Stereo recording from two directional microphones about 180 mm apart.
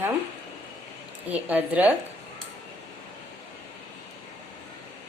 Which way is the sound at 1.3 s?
10° right (ahead or behind).